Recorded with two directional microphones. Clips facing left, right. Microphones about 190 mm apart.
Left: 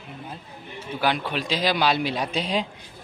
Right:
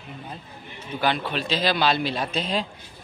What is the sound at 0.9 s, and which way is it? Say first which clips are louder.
A man's voice: even; 10° left (ahead or behind).